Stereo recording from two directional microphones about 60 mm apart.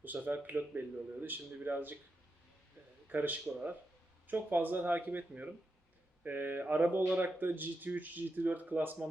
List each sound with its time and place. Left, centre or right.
0.0 s speech: right
3.1 s speech: right
6.2 s mantra: right
7.3 s speech: right